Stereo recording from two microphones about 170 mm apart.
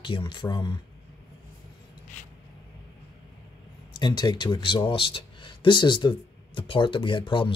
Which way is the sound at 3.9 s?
25° left (ahead or behind).